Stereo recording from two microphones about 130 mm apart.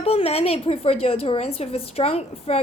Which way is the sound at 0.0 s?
50° left (ahead or behind).